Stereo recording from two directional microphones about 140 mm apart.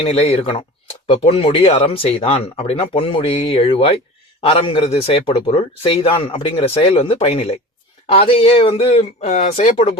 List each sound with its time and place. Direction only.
0.0 s speech: 45° left (ahead or behind)